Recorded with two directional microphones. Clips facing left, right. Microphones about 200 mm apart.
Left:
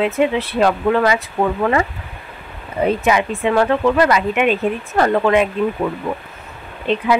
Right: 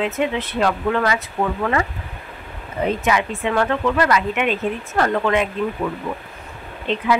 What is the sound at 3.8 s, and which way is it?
Speech, 20° left (ahead or behind).